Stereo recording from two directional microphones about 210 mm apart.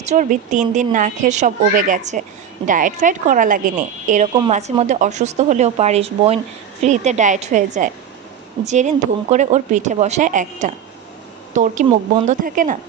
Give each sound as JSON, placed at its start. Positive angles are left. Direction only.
{"t": 0.0, "sound": "speech", "side_deg": -35}